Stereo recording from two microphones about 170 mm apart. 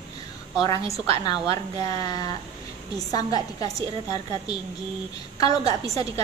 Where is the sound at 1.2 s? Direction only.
25° left (ahead or behind).